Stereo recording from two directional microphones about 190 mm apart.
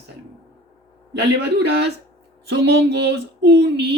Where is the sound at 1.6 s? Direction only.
60° right (ahead or behind).